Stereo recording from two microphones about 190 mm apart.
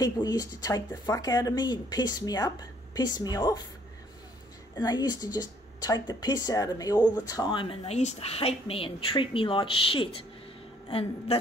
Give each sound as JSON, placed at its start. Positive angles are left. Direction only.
{"t": 0.0, "sound": "speech", "side_deg": 20}
{"t": 4.7, "sound": "speech", "side_deg": 20}